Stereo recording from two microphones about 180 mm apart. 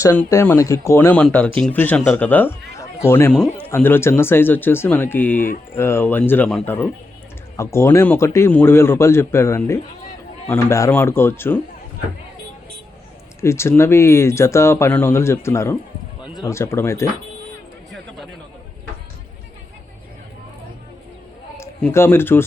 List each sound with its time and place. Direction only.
0.0 s speech: 15° left (ahead or behind)
13.4 s speech: 15° left (ahead or behind)
16.2 s a sound: centre (ahead or behind)
16.5 s speech: 15° left (ahead or behind)
21.6 s speech: 10° left (ahead or behind)